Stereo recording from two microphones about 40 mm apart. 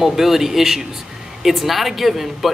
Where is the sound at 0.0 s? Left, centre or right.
Centre.